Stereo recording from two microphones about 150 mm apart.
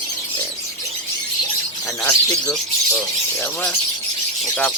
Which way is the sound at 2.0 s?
15° left (ahead or behind).